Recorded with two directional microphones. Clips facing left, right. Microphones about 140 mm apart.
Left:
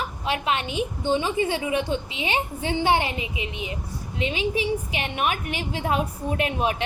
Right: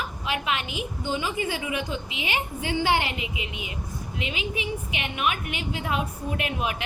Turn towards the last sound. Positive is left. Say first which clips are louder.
# left 4 dB
turn(degrees=35)  # may be behind; listen again after turning